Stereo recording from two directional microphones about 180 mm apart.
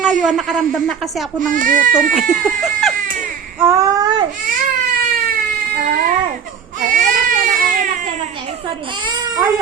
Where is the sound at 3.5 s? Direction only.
15° right (ahead or behind).